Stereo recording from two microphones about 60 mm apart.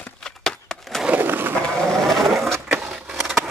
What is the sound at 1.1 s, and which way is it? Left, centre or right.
Bird, right.